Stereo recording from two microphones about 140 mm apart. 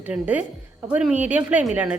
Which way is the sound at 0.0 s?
10° right (ahead or behind).